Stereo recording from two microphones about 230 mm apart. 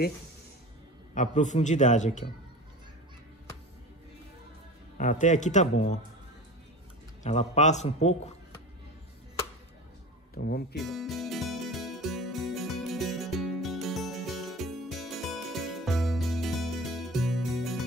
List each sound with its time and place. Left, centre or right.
1.1 s a man's voice: left
4.9 s a man's voice: left
7.2 s a man's voice: left
10.3 s speech: left
10.8 s music: centre